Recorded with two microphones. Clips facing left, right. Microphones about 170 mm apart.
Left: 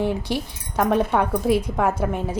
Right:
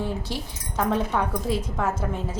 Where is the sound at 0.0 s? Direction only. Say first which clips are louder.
Left 6 dB; 15° left (ahead or behind).